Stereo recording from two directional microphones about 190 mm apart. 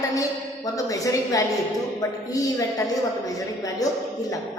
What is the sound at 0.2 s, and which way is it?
A woman's voice, 20° left (ahead or behind).